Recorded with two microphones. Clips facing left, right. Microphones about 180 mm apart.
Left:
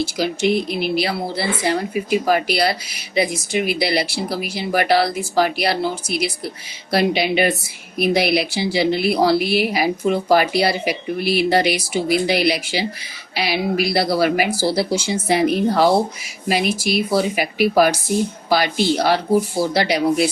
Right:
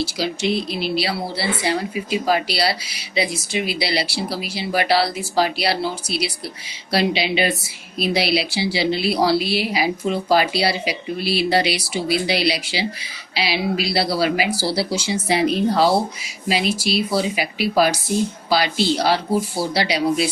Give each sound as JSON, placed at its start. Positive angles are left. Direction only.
{"t": 0.0, "sound": "a woman's voice", "side_deg": 50}